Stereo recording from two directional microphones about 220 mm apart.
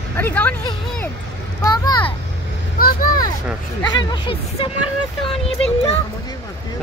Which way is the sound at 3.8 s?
20° left (ahead or behind).